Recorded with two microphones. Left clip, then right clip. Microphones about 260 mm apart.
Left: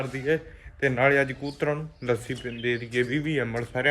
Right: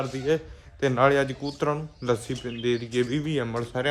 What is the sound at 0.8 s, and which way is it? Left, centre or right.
Speech, centre.